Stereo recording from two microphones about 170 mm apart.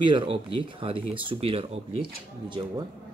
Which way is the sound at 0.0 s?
30° right (ahead or behind).